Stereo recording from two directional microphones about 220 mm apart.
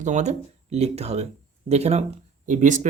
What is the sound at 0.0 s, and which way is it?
Speech, 30° right (ahead or behind).